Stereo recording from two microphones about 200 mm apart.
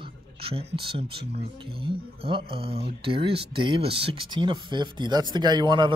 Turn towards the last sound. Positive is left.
turn(degrees=-25)  # may be behind; listen again after turning